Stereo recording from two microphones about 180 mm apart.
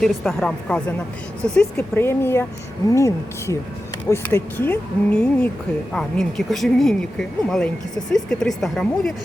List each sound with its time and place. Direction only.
0.0 s a woman's voice: 5° left (ahead or behind)